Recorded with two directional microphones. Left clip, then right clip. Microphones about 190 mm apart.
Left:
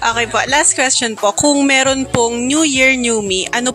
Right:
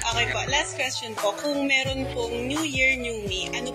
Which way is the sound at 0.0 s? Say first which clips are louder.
Left 10 dB; 50° left (ahead or behind).